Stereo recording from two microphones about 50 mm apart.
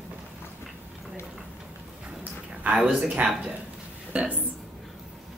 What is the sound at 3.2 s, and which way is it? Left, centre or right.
A woman's voice, right.